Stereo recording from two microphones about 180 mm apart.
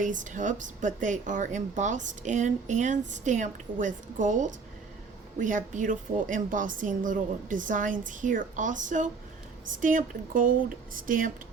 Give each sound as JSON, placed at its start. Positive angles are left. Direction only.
{"t": 0.0, "sound": "speech", "side_deg": -45}